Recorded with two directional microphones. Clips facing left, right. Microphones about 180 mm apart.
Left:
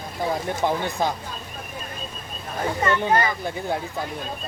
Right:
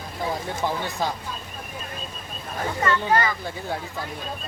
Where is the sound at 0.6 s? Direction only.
15° left (ahead or behind).